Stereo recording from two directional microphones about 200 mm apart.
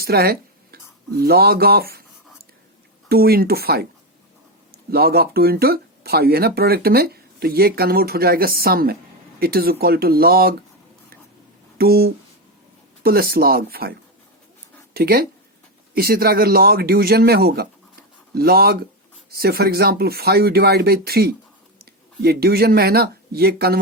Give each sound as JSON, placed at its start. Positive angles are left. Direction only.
{"t": 0.0, "sound": "speech", "side_deg": -50}
{"t": 3.1, "sound": "speech", "side_deg": -50}
{"t": 4.9, "sound": "speech", "side_deg": -50}
{"t": 11.8, "sound": "speech", "side_deg": -50}
{"t": 14.9, "sound": "speech", "side_deg": -50}